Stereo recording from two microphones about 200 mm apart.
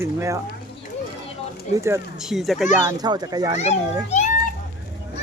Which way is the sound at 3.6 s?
35° left (ahead or behind).